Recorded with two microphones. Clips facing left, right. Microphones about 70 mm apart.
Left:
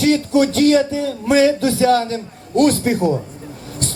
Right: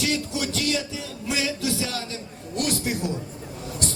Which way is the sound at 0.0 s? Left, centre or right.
Left.